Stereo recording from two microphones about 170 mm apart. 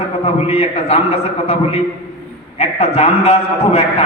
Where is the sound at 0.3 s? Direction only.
35° left (ahead or behind).